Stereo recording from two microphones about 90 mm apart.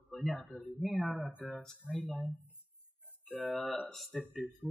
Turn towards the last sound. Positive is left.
turn(degrees=0)  # may be behind; listen again after turning